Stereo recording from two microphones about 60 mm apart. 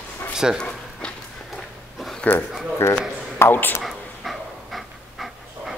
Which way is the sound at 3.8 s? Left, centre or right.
Centre.